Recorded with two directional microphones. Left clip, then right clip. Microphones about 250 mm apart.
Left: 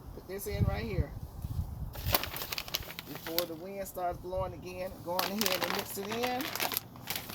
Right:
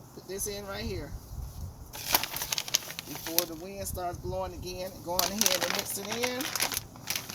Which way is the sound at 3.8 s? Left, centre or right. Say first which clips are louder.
Left 1 dB; centre.